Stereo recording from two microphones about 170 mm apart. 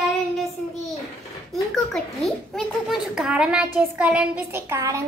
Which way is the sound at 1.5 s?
Centre (ahead or behind).